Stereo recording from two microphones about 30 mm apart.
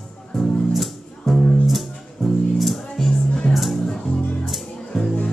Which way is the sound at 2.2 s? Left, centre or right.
Centre.